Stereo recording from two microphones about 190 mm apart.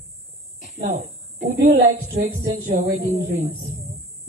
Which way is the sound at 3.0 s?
35° right (ahead or behind).